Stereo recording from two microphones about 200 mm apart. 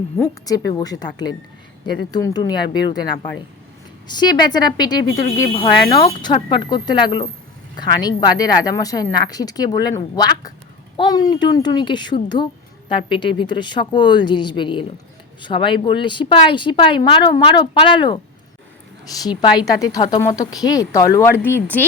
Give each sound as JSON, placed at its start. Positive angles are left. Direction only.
{"t": 0.2, "sound": "speech", "side_deg": 20}
{"t": 4.1, "sound": "speech", "side_deg": 20}
{"t": 10.9, "sound": "speech", "side_deg": 20}
{"t": 19.2, "sound": "speech", "side_deg": 20}